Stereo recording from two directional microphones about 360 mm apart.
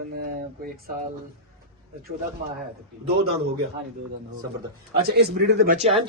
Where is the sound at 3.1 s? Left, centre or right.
Right.